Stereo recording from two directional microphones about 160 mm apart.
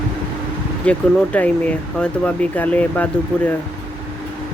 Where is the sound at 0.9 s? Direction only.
10° left (ahead or behind).